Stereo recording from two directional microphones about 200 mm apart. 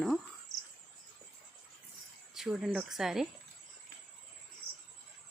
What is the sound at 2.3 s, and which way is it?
Speech, centre (ahead or behind).